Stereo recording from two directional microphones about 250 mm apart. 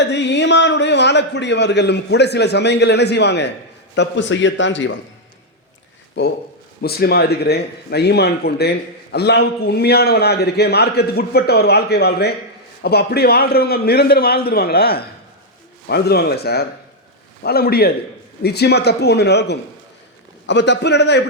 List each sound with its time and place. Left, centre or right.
0.0 s a man's voice: left
6.8 s a man's voice: left